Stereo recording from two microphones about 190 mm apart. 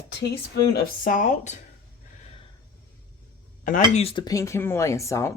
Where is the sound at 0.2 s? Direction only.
60° left (ahead or behind); by 1.5 s 40° left (ahead or behind).